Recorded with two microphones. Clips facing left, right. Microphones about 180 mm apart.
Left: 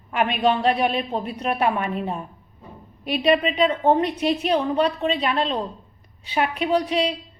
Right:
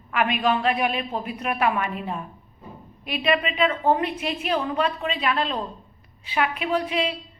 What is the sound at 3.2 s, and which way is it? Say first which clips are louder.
Speech: left 3 dB; 35° left (ahead or behind).